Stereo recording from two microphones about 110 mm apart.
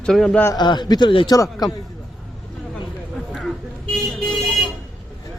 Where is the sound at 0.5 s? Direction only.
40° left (ahead or behind).